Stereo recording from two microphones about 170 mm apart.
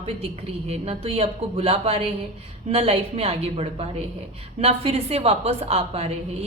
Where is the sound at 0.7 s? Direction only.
35° right (ahead or behind).